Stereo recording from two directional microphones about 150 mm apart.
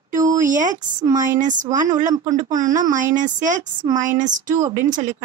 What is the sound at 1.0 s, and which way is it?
Speech, 25° right (ahead or behind).